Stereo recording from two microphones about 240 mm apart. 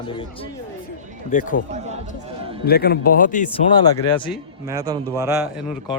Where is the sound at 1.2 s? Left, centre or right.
Left.